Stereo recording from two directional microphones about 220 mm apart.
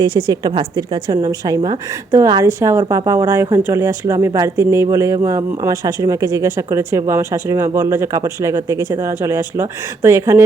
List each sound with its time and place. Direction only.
0.0 s a woman's voice: 20° right (ahead or behind)